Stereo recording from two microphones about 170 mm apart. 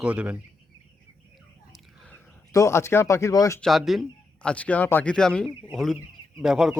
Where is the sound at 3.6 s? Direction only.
Centre (ahead or behind).